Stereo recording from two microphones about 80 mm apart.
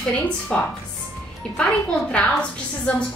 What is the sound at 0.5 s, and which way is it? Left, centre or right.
A woman's voice, centre.